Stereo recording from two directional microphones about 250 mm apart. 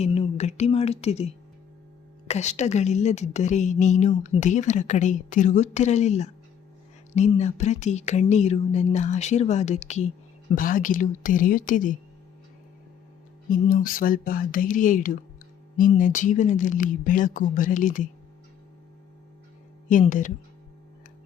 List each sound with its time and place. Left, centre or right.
0.0 s a woman's voice: left
13.5 s speech: left
19.9 s speech: left